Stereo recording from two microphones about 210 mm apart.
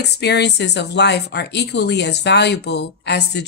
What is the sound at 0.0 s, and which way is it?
Speech, 50° left (ahead or behind).